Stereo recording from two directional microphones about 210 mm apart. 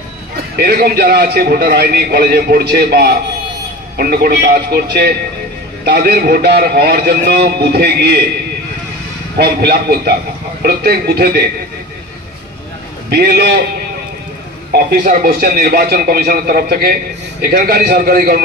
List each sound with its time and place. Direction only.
0.6 s a man's voice: 50° right (ahead or behind)
9.4 s a man's voice: 50° right (ahead or behind)
13.1 s a man's voice: 50° right (ahead or behind)
14.7 s a man's voice: 45° right (ahead or behind)